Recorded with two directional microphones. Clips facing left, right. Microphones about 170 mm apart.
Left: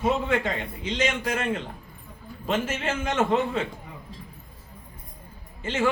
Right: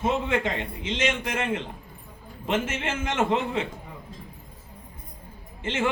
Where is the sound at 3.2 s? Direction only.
20° right (ahead or behind).